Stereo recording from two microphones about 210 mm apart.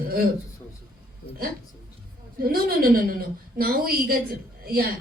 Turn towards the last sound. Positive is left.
turn(degrees=-45)  # may be behind; listen again after turning